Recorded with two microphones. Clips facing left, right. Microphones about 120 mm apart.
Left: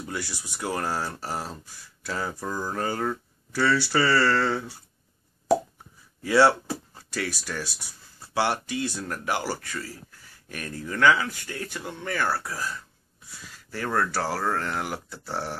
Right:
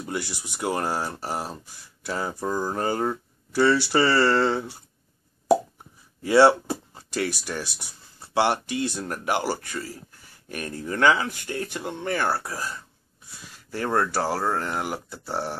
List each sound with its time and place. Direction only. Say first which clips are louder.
0.0 s speech: right 3 dB; 20° right (ahead or behind)
6.2 s speech: right 3 dB; 20° right (ahead or behind)